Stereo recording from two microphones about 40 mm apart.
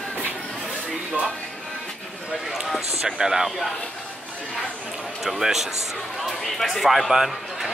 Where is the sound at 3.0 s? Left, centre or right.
Centre.